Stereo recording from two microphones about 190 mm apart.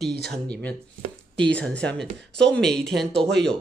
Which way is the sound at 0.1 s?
55° right (ahead or behind).